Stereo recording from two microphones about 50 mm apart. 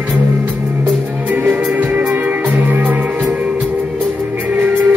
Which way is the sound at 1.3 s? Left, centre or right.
Right.